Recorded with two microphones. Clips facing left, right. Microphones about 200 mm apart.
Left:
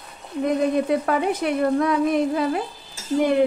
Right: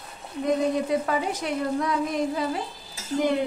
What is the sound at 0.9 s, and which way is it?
Speech, 60° left (ahead or behind).